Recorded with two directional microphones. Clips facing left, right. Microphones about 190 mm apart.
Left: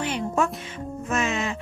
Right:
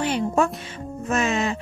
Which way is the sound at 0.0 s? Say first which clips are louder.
Right 3 dB; 35° right (ahead or behind).